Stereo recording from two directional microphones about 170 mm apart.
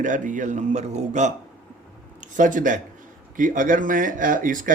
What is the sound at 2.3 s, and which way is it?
Speech, 50° right (ahead or behind).